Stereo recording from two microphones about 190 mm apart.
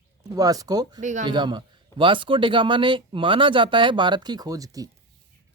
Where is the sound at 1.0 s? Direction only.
40° right (ahead or behind).